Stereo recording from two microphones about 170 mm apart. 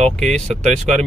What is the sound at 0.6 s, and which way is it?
Speech, 40° right (ahead or behind).